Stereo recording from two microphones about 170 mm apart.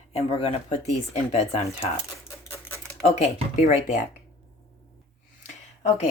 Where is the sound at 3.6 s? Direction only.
45° left (ahead or behind).